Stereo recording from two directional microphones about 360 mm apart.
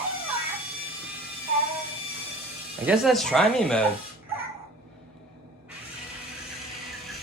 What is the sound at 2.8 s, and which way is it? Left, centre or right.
Speech, centre.